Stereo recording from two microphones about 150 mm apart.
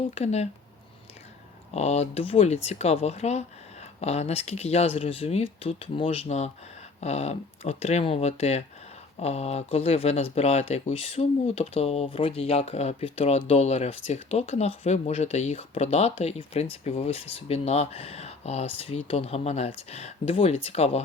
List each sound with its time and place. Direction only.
0.1 s speech: 45° left (ahead or behind)
1.7 s speech: 45° left (ahead or behind)